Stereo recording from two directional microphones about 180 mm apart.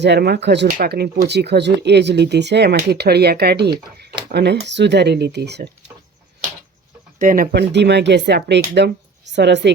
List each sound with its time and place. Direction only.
0.0 s speech: 70° right (ahead or behind)
7.2 s speech: 50° right (ahead or behind)
7.5 s speech: 70° right (ahead or behind)